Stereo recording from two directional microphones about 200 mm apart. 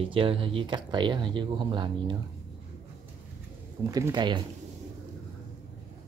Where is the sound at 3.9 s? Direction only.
20° right (ahead or behind).